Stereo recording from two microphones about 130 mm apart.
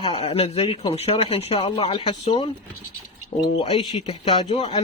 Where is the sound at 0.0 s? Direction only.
50° left (ahead or behind).